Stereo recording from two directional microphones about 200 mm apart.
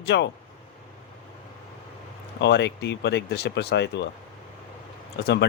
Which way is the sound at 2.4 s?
60° left (ahead or behind).